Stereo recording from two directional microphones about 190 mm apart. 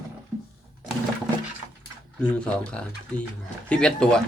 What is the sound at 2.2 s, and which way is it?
Speech, 5° left (ahead or behind).